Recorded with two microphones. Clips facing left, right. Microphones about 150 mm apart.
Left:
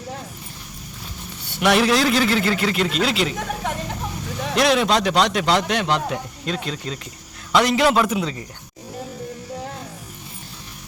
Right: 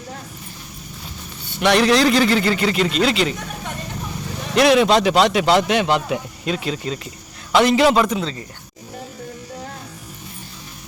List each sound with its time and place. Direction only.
1.5 s a man's voice: 5° left (ahead or behind)
3.6 s vehicle: 90° left
4.5 s a man's voice: centre (ahead or behind)